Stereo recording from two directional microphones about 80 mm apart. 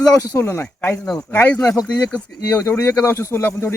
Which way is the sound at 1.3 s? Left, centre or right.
Left.